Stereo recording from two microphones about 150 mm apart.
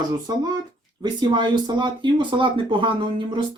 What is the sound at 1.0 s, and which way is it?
Speech, 30° right (ahead or behind).